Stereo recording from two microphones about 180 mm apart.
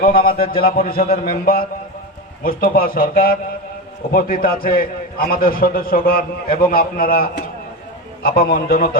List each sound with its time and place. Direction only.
0.0 s a man's voice: 55° left (ahead or behind)